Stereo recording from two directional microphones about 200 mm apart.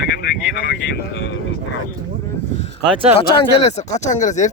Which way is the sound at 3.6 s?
35° left (ahead or behind).